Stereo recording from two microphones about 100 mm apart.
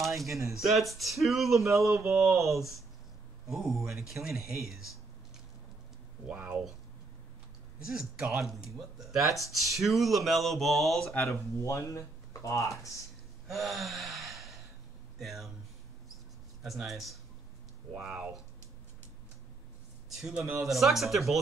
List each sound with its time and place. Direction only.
0.0 s speech: centre (ahead or behind)
2.2 s speech: 30° right (ahead or behind)
3.4 s speech: centre (ahead or behind)
6.3 s speech: 20° right (ahead or behind)
7.8 s speech: 5° right (ahead or behind)
11.6 s speech: 30° left (ahead or behind)
13.5 s gasp: centre (ahead or behind)
15.1 s speech: centre (ahead or behind)
16.6 s speech: centre (ahead or behind)
17.9 s speech: 15° right (ahead or behind)
20.6 s speech: centre (ahead or behind)